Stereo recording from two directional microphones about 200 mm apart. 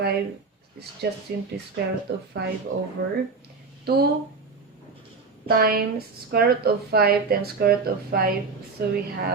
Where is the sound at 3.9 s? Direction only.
55° right (ahead or behind).